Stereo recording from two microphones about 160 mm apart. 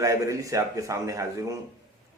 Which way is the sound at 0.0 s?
20° right (ahead or behind).